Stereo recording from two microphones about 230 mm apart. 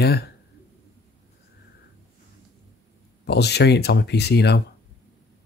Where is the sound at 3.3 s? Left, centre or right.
Left.